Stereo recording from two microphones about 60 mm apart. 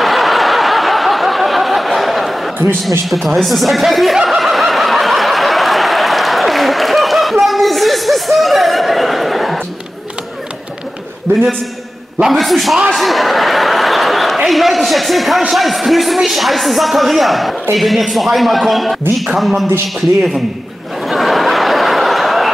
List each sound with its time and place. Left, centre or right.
0.0 s snicker: centre
3.1 s a man's voice: centre
4.2 s snicker: centre
11.3 s a man's voice: right
12.3 s a man's voice: centre
21.0 s a sound: centre